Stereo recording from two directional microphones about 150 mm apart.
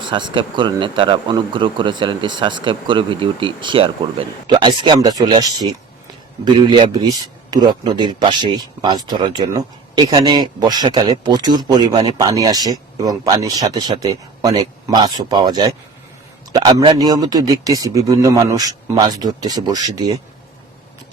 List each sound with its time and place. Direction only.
0.0 s a man's voice: 30° right (ahead or behind)